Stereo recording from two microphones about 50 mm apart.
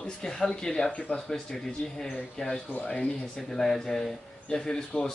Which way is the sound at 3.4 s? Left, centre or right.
Centre.